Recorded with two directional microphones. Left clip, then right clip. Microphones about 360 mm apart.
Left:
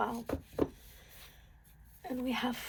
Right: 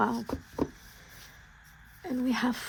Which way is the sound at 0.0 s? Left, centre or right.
Right.